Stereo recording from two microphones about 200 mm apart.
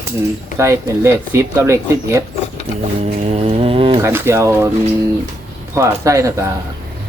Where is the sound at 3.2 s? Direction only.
30° right (ahead or behind).